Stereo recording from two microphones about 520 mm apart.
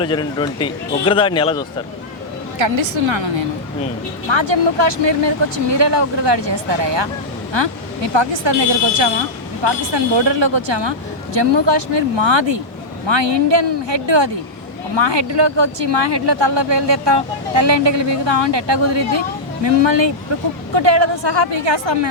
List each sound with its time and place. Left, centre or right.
0.0 s speech: centre
2.6 s speech: right
4.3 s speech: right
9.6 s speech: right